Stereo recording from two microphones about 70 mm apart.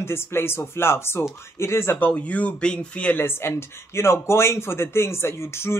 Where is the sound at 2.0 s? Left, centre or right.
Centre.